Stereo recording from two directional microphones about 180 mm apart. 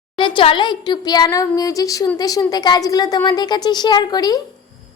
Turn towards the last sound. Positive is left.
turn(degrees=20)  # may be behind; listen again after turning